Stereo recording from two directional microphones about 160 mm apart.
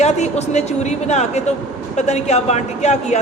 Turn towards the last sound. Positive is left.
turn(degrees=45)  # may be behind; listen again after turning